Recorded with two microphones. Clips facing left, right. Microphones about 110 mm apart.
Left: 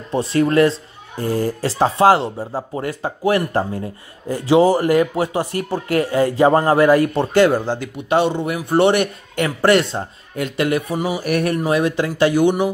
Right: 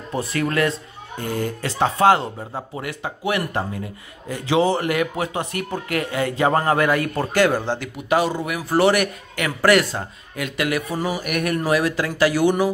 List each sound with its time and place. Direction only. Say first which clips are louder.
0.1 s speech: left 7 dB; 30° left (ahead or behind)
7.8 s speech: left 2 dB; 25° left (ahead or behind)
11.0 s a man's voice: left 2 dB; 15° left (ahead or behind)
11.2 s speech: left 4 dB; 30° left (ahead or behind)